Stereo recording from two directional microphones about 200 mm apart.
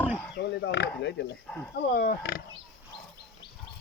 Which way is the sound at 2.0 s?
50° left (ahead or behind).